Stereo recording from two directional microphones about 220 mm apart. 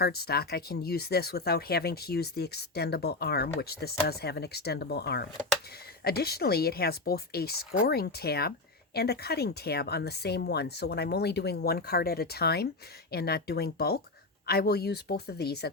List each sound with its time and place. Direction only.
0.0 s speech: 45° left (ahead or behind)